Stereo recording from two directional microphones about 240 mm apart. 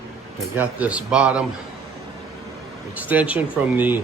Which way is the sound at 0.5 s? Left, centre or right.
Centre.